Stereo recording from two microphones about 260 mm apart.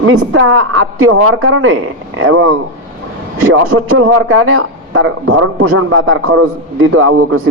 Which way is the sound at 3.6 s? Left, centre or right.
Right.